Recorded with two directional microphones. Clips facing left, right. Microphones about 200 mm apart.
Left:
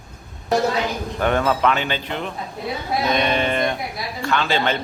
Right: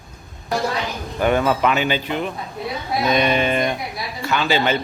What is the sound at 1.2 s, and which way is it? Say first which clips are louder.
A man's voice: right 1 dB; 10° right (ahead or behind).